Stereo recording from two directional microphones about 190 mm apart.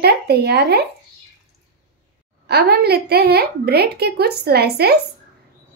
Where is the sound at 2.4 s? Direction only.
55° right (ahead or behind).